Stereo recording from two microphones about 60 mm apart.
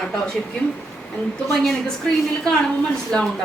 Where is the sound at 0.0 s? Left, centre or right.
Centre.